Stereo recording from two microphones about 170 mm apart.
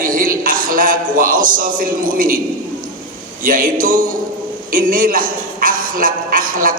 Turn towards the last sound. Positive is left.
turn(degrees=-55)  # may be behind; listen again after turning